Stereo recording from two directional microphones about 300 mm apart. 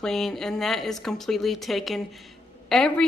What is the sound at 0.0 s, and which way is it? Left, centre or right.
A woman's voice, centre.